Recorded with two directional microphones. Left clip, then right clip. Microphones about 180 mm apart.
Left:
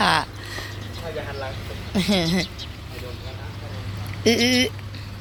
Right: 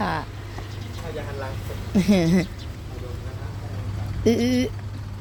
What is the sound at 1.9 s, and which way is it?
Speech, 45° right (ahead or behind).